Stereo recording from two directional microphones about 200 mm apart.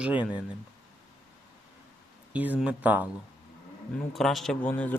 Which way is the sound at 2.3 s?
10° right (ahead or behind).